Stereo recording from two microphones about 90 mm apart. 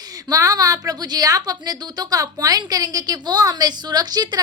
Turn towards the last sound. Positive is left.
turn(degrees=-50)  # may be behind; listen again after turning